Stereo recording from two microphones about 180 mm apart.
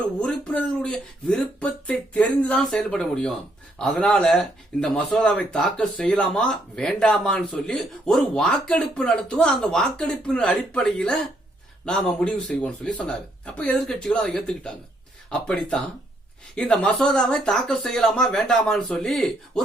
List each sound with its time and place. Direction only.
0.2 s speech: 10° left (ahead or behind)